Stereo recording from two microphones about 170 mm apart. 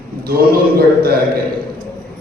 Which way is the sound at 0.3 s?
60° right (ahead or behind).